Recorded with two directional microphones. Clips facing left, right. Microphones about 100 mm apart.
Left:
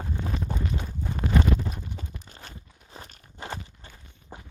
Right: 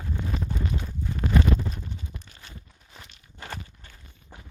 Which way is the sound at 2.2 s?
35° left (ahead or behind).